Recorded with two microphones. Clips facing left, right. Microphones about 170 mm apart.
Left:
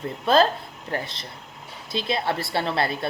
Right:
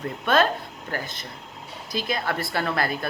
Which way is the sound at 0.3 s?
30° left (ahead or behind).